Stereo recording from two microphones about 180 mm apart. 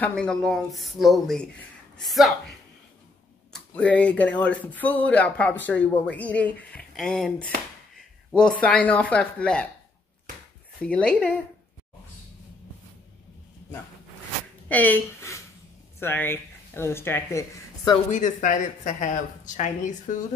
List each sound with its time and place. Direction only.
0.0 s a woman's voice: 5° left (ahead or behind)
3.5 s speech: 5° left (ahead or behind)
10.8 s speech: 5° left (ahead or behind)
14.7 s speech: 10° left (ahead or behind)
18.1 s speech: 45° left (ahead or behind)